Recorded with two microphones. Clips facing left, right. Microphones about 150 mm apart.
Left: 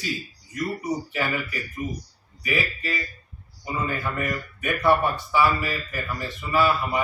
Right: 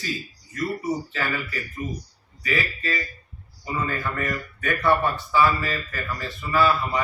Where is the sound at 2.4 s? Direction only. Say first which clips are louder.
Even; 15° left (ahead or behind).